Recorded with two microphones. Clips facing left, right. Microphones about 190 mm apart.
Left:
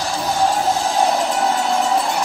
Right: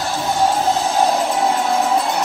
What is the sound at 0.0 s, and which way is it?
Music, centre (ahead or behind).